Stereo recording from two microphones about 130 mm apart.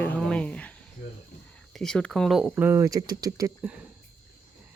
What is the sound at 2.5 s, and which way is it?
Speech, 15° right (ahead or behind).